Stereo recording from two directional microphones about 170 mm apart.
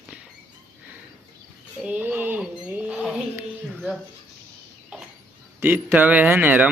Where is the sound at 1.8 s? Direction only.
10° right (ahead or behind).